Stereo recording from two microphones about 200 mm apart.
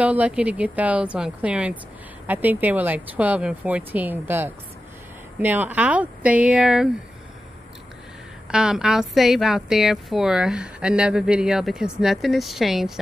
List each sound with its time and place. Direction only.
0.0 s speech: 5° right (ahead or behind)
8.5 s a woman's voice: 5° right (ahead or behind)